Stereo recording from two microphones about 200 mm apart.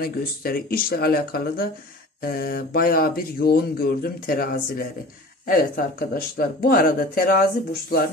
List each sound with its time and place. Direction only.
0.0 s speech: 50° left (ahead or behind)